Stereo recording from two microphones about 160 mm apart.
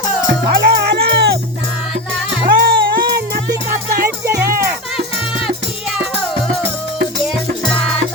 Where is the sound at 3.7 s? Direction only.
65° right (ahead or behind).